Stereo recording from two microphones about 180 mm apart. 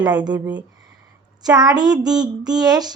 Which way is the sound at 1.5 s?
20° right (ahead or behind).